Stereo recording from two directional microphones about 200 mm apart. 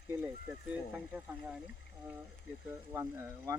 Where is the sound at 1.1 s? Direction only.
10° right (ahead or behind).